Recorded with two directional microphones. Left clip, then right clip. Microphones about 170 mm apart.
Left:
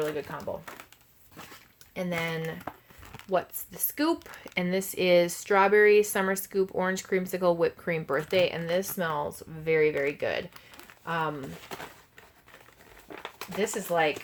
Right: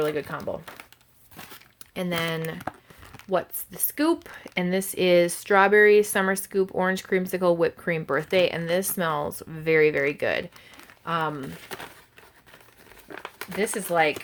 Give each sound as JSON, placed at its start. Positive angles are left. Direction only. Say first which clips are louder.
{"t": 0.0, "sound": "speech", "louder": "right 5 dB", "side_deg": -45}
{"t": 0.3, "sound": "speech", "louder": "right 4 dB", "side_deg": -10}
{"t": 2.0, "sound": "speech", "louder": "right 3 dB", "side_deg": -35}
{"t": 13.6, "sound": "speech", "louder": "right 3 dB", "side_deg": -35}